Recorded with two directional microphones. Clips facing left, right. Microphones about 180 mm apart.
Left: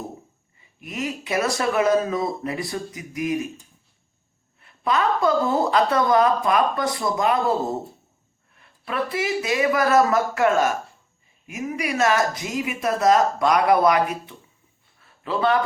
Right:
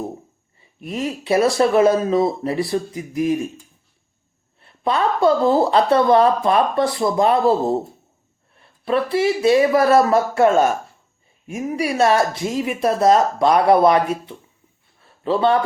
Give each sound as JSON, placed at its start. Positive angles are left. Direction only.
{"t": 0.8, "sound": "speech", "side_deg": -30}
{"t": 4.6, "sound": "a man's voice", "side_deg": -30}